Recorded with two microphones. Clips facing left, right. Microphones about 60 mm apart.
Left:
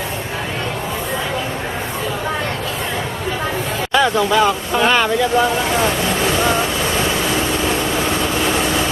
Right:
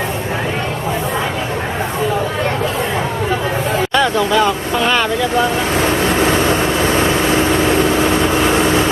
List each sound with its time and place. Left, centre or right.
3.9 s speech: centre
5.8 s vehicle: right